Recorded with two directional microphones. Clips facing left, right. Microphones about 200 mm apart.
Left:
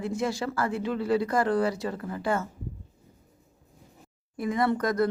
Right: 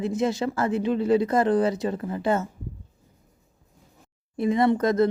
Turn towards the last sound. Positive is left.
turn(degrees=-25)  # may be behind; listen again after turning